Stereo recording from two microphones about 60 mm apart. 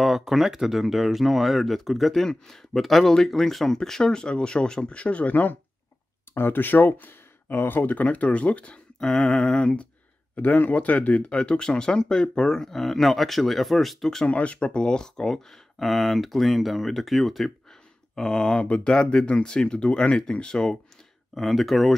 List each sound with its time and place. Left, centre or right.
0.0 s speech: centre
14.2 s speech: left; by 17.5 s centre
18.1 s speech: centre